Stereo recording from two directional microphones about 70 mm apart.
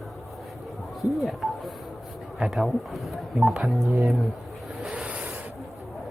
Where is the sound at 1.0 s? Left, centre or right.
Centre.